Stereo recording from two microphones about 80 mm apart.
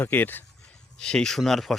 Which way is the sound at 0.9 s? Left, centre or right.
Centre.